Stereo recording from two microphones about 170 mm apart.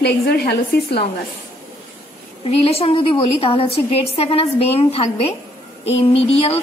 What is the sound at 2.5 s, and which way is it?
A woman's voice, 35° left (ahead or behind).